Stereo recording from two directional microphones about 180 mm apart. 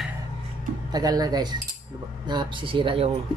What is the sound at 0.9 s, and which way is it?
Speech, 20° right (ahead or behind).